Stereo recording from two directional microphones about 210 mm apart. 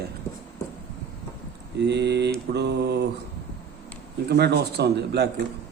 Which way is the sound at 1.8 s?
55° right (ahead or behind).